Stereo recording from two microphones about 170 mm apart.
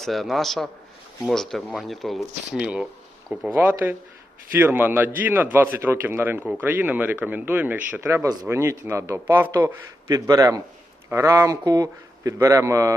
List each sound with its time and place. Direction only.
0.0 s speech: centre (ahead or behind); by 12.9 s 20° right (ahead or behind)